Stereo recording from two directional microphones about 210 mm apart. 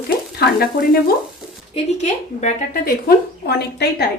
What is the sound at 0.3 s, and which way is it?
Speech, 45° left (ahead or behind).